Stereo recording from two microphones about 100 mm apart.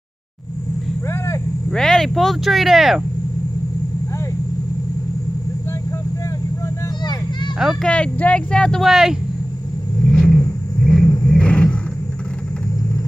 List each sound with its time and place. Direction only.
1.0 s vehicle: 30° left (ahead or behind)
1.7 s speech: 5° left (ahead or behind)
7.8 s speech: 10° left (ahead or behind)
10.0 s a sound: 10° left (ahead or behind)